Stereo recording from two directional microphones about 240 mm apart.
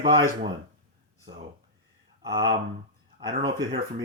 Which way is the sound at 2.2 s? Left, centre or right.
Centre.